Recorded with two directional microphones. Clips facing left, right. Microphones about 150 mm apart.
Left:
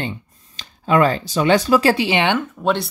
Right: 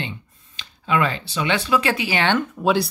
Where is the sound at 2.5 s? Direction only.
5° right (ahead or behind).